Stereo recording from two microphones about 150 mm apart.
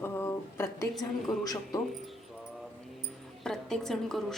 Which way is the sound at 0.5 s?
15° left (ahead or behind).